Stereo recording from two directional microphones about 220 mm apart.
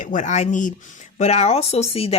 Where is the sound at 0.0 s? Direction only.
35° left (ahead or behind).